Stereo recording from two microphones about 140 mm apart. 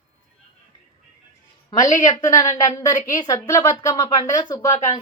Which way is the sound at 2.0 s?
25° left (ahead or behind).